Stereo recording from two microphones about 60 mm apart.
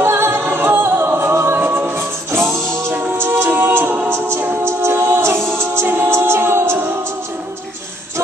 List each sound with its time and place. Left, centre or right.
0.0 s a capella: right